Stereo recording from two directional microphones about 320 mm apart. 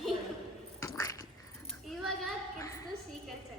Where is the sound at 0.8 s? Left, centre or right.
Centre.